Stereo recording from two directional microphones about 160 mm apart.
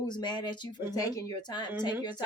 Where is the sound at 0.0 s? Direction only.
25° left (ahead or behind).